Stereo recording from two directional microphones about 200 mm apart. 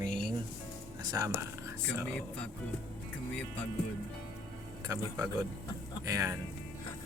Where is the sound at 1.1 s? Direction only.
15° right (ahead or behind).